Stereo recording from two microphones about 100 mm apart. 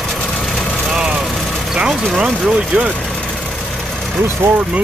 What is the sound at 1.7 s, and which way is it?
Speech, 5° right (ahead or behind).